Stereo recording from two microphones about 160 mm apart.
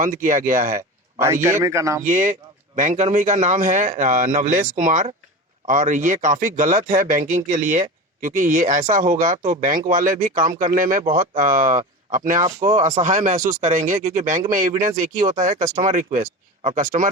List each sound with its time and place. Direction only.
0.0 s speech: 55° right (ahead or behind)
1.2 s a man's voice: 15° right (ahead or behind)
2.0 s speech: 50° right (ahead or behind)